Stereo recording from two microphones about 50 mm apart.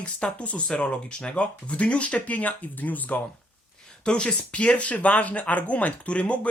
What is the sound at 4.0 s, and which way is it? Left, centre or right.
Speech, centre.